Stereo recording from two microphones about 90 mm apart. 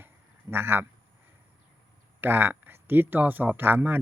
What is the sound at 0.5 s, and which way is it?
Speech, 25° right (ahead or behind).